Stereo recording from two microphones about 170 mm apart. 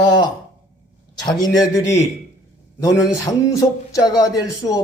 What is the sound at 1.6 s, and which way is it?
A man's voice, 20° left (ahead or behind).